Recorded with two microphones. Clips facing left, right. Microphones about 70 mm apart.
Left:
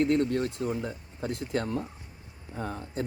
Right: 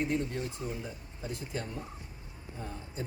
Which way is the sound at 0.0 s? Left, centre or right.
Left.